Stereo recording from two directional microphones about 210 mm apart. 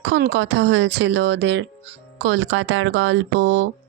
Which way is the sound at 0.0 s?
55° right (ahead or behind).